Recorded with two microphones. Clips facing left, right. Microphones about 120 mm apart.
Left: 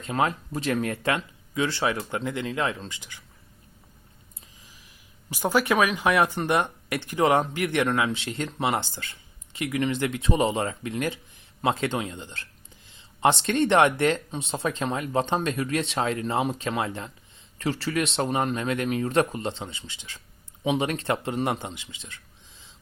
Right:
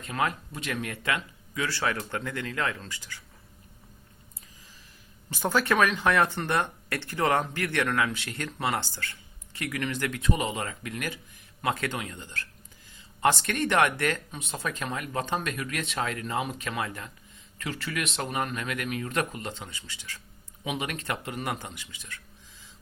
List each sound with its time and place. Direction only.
0.0 s speech: 30° left (ahead or behind)
5.3 s speech: 10° left (ahead or behind)